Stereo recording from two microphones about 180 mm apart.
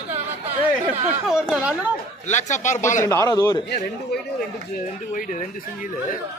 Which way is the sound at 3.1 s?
15° left (ahead or behind).